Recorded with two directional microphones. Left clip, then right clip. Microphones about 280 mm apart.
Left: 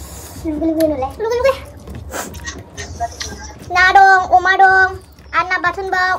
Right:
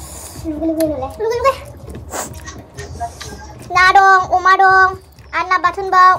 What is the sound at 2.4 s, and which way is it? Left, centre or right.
Speech, left.